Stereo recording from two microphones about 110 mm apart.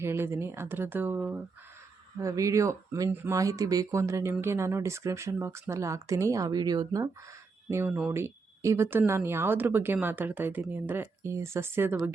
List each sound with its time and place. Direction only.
0.0 s speech: 20° right (ahead or behind)
2.1 s speech: 30° right (ahead or behind)
7.7 s speech: 25° right (ahead or behind)